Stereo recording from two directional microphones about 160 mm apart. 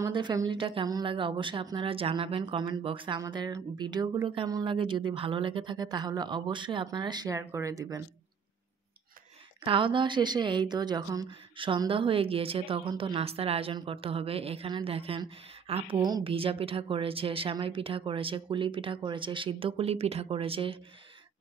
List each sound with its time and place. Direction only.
0.0 s speech: 30° right (ahead or behind)
9.7 s speech: 30° right (ahead or behind)
16.0 s speech: 25° right (ahead or behind)